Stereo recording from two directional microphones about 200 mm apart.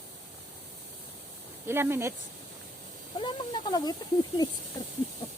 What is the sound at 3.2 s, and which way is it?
Speech, 20° left (ahead or behind).